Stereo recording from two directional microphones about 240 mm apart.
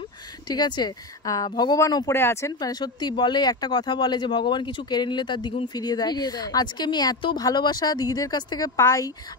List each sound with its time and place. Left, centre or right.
0.5 s speech: centre